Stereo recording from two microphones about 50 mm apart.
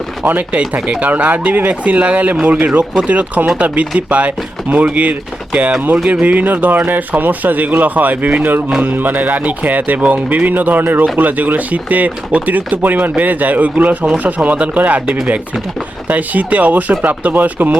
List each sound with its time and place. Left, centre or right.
0.3 s speech: right